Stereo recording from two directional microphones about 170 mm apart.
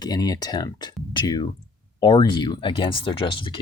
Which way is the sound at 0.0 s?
20° left (ahead or behind).